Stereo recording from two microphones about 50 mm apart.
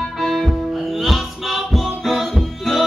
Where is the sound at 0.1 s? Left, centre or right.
Centre.